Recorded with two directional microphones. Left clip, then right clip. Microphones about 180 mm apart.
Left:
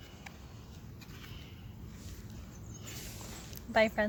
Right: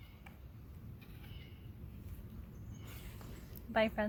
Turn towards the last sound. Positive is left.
turn(degrees=10)  # may be behind; listen again after turning